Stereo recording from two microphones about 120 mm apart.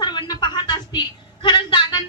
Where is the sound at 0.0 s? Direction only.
35° left (ahead or behind).